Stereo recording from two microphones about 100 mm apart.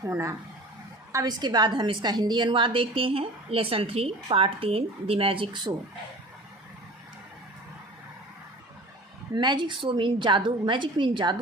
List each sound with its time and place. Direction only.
0.1 s speech: 30° right (ahead or behind)
1.1 s a woman's voice: 40° right (ahead or behind)
9.3 s a woman's voice: 50° right (ahead or behind)